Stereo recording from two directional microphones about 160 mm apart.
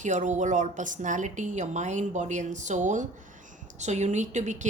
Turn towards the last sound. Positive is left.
turn(degrees=-50)  # may be behind; listen again after turning